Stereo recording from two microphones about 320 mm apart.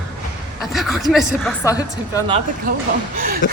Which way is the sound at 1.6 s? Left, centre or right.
Centre.